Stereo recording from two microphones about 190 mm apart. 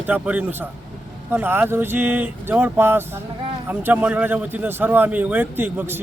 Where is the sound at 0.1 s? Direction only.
10° right (ahead or behind).